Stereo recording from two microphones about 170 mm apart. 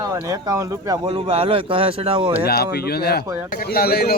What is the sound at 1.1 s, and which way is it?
A man's voice, 35° right (ahead or behind).